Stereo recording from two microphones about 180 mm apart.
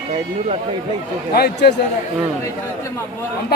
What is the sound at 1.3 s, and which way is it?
Speech, 65° left (ahead or behind).